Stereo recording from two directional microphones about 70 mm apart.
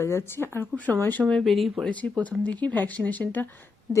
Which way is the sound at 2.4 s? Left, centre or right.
Left.